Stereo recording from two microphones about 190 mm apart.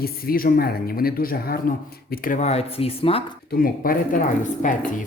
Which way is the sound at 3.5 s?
50° left (ahead or behind).